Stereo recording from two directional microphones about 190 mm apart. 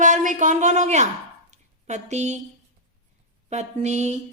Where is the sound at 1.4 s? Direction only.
40° right (ahead or behind).